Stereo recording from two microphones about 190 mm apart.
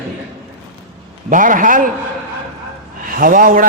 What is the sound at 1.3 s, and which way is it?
Speech, 45° right (ahead or behind).